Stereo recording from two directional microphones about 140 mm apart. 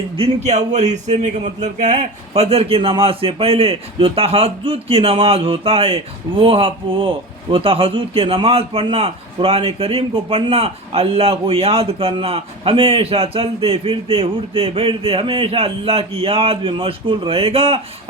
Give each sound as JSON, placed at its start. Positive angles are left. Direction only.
{"t": 0.2, "sound": "a man's voice", "side_deg": -50}